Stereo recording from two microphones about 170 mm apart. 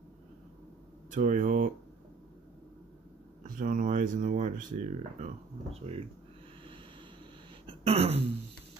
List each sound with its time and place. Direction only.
1.1 s speech: 50° right (ahead or behind)
3.5 s speech: 55° right (ahead or behind); by 6.0 s 35° right (ahead or behind)
7.6 s throat clearing: 35° right (ahead or behind)